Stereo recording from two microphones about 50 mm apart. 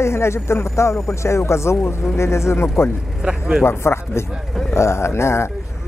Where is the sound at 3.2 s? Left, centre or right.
Centre.